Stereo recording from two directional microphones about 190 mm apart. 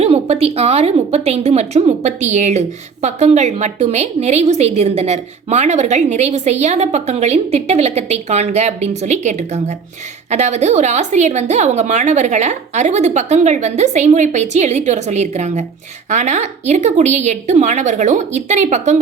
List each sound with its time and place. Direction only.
0.0 s a woman's voice: 30° right (ahead or behind)